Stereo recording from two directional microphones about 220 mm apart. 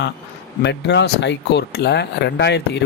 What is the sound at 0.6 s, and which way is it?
Speech, 50° left (ahead or behind).